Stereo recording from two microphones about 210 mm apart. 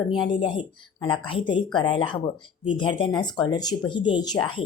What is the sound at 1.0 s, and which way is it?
Speech, 25° left (ahead or behind).